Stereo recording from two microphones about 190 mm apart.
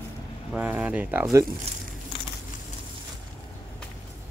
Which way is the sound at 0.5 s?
10° right (ahead or behind).